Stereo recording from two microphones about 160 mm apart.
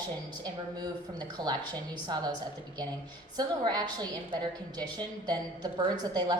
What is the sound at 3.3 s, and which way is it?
A woman's voice, 25° right (ahead or behind).